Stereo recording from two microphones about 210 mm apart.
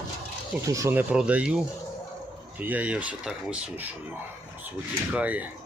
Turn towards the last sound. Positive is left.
turn(degrees=-5)  # may be behind; listen again after turning